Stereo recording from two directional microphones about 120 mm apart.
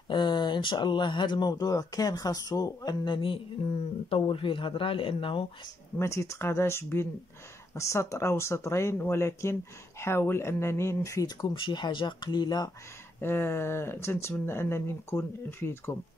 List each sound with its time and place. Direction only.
0.1 s speech: 40° left (ahead or behind)
4.1 s speech: 45° left (ahead or behind)
5.9 s speech: 25° left (ahead or behind)
13.2 s speech: 20° left (ahead or behind)